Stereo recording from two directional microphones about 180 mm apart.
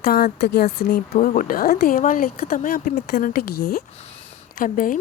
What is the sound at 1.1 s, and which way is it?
Speech, 45° left (ahead or behind).